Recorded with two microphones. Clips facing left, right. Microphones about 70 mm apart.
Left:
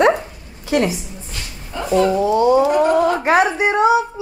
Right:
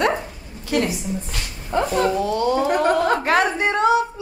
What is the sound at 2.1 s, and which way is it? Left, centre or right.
A woman's voice, centre.